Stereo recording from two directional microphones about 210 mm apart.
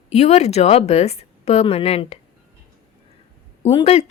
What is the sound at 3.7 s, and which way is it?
Speech, 25° left (ahead or behind).